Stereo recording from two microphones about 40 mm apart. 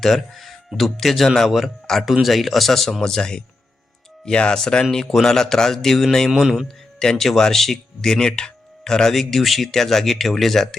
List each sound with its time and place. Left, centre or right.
0.0 s speech: centre
6.3 s speech: centre
7.0 s speech: centre
9.1 s speech: centre